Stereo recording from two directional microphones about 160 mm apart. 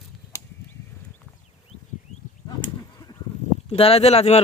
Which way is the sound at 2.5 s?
25° left (ahead or behind).